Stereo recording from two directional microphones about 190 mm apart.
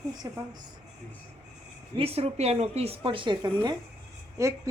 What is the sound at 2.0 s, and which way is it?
A woman's voice, 30° right (ahead or behind).